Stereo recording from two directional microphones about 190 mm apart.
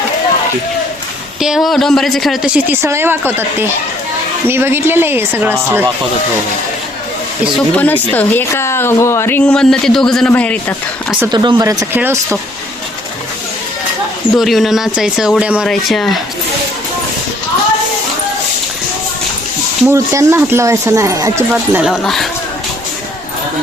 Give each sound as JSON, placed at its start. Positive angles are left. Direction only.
{"t": 1.4, "sound": "a woman's voice", "side_deg": 0}
{"t": 7.5, "sound": "a woman's voice", "side_deg": 10}
{"t": 11.3, "sound": "speech", "side_deg": -25}
{"t": 14.3, "sound": "a woman's voice", "side_deg": 0}
{"t": 19.9, "sound": "a woman's voice", "side_deg": -15}